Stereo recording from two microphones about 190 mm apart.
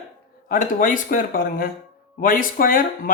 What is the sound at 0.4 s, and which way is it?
Speech, 45° left (ahead or behind).